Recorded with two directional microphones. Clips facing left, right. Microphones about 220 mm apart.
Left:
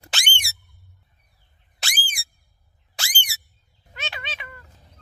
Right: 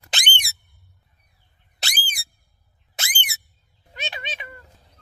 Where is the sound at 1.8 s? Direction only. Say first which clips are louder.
Right 1 dB; 40° right (ahead or behind).